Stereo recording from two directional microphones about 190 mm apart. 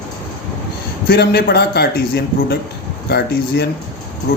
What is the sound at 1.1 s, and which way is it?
Speech, 55° left (ahead or behind).